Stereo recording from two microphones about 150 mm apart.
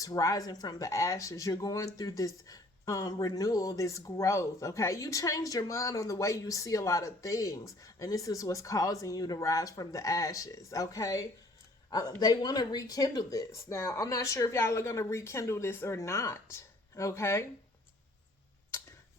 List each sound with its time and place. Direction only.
0.0 s a woman's voice: 20° left (ahead or behind)